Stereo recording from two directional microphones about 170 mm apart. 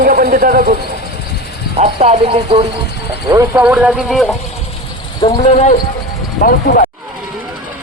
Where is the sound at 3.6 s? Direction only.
5° right (ahead or behind).